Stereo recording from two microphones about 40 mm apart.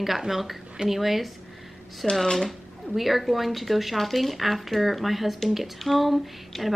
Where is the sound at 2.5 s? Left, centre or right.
Centre.